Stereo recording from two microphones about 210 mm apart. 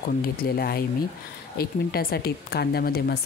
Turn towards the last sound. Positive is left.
turn(degrees=45)  # may be behind; listen again after turning